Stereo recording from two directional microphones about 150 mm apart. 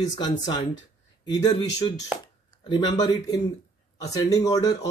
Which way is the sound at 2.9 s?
25° left (ahead or behind).